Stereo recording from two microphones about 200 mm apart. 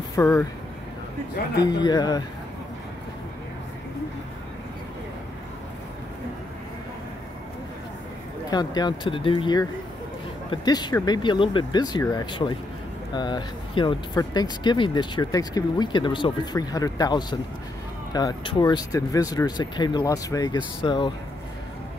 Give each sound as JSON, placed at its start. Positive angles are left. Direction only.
{"t": 0.1, "sound": "speech", "side_deg": 15}
{"t": 1.6, "sound": "speech", "side_deg": 20}
{"t": 8.5, "sound": "speech", "side_deg": 20}